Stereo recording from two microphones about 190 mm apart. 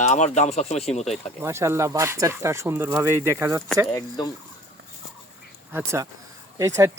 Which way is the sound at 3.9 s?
20° left (ahead or behind).